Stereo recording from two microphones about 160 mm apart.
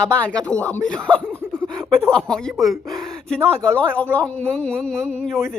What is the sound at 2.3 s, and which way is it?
Speech, 5° left (ahead or behind).